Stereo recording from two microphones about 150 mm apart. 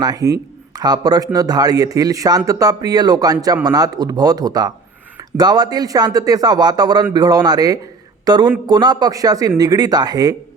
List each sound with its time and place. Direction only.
0.0 s speech: 25° right (ahead or behind)